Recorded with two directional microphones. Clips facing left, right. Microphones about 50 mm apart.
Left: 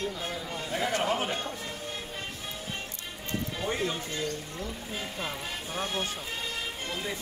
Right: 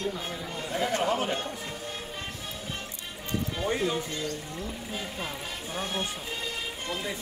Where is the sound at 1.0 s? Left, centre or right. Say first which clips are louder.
Right 2 dB; centre.